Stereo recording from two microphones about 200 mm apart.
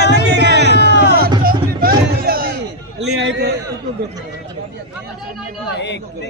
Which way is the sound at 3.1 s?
60° right (ahead or behind).